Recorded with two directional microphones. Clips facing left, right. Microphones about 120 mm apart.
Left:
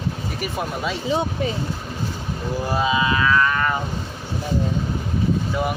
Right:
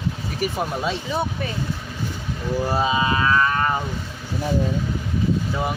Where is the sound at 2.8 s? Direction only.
35° right (ahead or behind).